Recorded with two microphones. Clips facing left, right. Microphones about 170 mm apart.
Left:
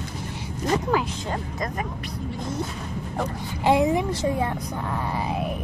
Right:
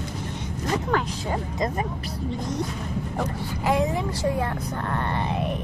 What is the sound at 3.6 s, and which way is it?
Speech, 25° left (ahead or behind).